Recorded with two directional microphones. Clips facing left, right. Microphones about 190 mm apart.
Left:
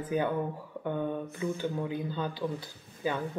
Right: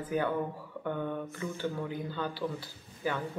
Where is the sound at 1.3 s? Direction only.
15° left (ahead or behind).